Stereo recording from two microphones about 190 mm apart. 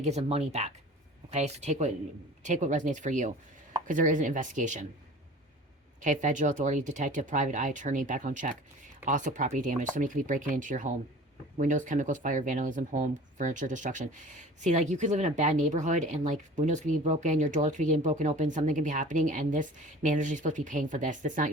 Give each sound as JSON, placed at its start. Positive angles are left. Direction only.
{"t": 0.0, "sound": "speech", "side_deg": -35}
{"t": 6.0, "sound": "speech", "side_deg": -40}